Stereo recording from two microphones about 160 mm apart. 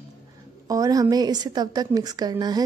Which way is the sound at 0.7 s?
20° right (ahead or behind).